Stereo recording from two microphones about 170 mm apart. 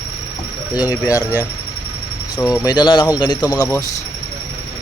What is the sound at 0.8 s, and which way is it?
Speech, 10° right (ahead or behind).